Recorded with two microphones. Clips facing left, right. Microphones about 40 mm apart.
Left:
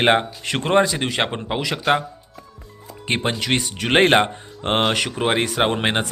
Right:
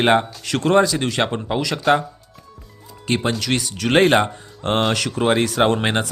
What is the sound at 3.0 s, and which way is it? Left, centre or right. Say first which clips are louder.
Speech: right 1 dB; left.